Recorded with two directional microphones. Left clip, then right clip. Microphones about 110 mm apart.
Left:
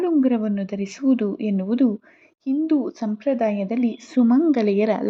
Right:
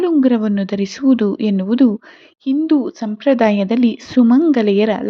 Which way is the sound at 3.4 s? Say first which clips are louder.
Right 7 dB; 40° right (ahead or behind).